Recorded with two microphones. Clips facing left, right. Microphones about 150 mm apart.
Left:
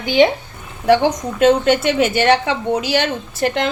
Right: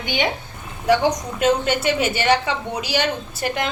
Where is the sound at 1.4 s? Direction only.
60° left (ahead or behind).